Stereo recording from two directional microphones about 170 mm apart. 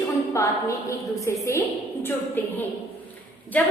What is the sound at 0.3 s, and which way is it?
A woman's voice, 20° left (ahead or behind).